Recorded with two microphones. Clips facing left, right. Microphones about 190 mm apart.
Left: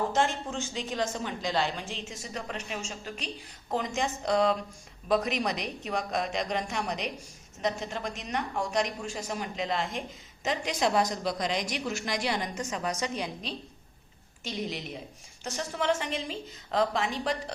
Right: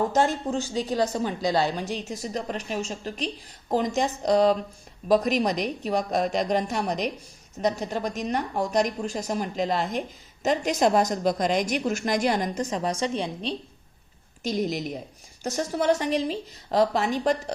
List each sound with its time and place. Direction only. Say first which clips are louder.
0.1 s a woman's voice: right 5 dB; 40° right (ahead or behind)
14.4 s a woman's voice: right 8 dB; 40° right (ahead or behind)